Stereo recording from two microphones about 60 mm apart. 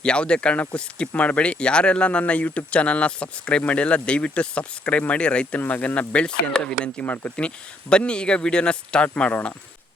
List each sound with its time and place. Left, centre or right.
0.0 s speech: centre